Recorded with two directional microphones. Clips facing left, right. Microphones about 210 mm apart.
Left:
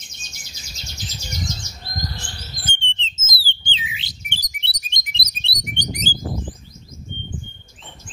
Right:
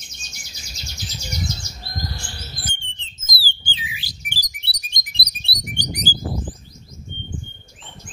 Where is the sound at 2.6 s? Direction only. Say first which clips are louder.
Left 2 dB; 25° left (ahead or behind).